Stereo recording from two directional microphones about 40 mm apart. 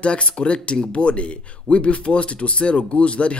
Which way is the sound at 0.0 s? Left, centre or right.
Left.